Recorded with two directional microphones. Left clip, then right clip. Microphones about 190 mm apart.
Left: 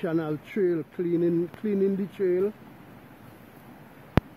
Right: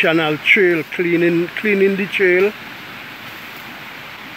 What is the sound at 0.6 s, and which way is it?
Speech, 15° right (ahead or behind).